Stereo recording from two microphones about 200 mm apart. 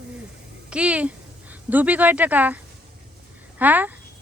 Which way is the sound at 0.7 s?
5° right (ahead or behind).